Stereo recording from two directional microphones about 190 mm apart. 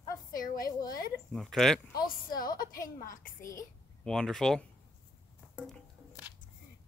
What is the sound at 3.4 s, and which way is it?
Speech, 15° left (ahead or behind).